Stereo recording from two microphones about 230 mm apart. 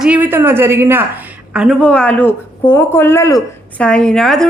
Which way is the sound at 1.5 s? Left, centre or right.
Centre.